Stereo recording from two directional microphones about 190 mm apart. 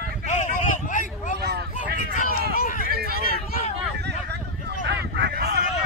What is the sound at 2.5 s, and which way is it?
Run, 50° left (ahead or behind).